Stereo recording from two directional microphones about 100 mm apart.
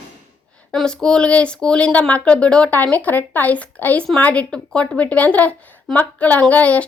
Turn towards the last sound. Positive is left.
turn(degrees=15)  # may be behind; listen again after turning